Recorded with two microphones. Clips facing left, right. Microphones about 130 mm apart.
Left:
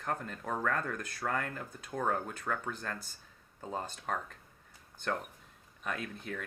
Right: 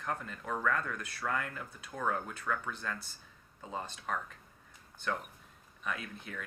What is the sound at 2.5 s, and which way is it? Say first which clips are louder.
Speech: right 1 dB; 25° left (ahead or behind).